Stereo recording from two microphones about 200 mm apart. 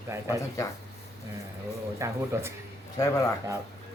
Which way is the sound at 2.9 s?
15° left (ahead or behind).